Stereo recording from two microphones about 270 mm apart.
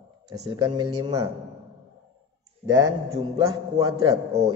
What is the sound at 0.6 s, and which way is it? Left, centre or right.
Speech, centre.